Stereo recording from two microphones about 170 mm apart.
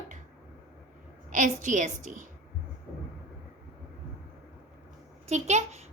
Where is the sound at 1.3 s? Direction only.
50° right (ahead or behind).